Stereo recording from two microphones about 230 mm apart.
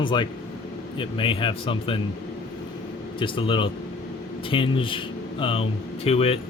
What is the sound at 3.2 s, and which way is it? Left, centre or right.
Speech, left.